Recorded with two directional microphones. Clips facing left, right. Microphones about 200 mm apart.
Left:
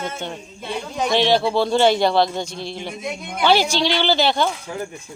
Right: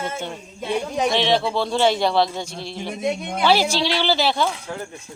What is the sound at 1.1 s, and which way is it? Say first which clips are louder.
Speech: left 6 dB; centre (ahead or behind).